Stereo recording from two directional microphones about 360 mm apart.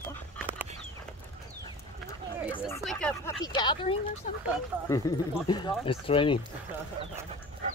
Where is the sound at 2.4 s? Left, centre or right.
Centre.